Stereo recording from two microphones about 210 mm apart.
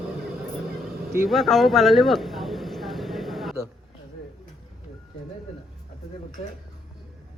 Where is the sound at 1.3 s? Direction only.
Centre (ahead or behind).